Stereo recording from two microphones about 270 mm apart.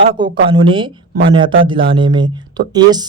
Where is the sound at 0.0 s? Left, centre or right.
Centre.